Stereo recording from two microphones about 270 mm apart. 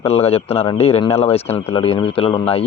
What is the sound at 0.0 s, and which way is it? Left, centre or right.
A man's voice, left.